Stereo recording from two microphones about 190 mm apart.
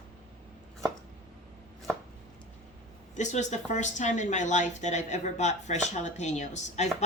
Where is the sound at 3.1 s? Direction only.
40° left (ahead or behind).